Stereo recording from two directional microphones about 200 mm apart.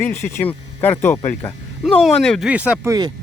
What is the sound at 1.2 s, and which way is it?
Speech, 35° left (ahead or behind).